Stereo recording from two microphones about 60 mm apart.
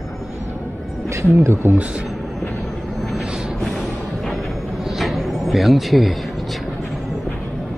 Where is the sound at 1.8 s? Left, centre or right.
Centre.